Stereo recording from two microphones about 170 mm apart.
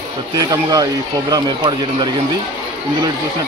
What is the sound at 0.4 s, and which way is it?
Speech, 20° right (ahead or behind).